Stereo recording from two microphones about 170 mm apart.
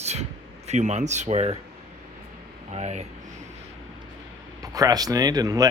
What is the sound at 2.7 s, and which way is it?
Speech, 40° right (ahead or behind).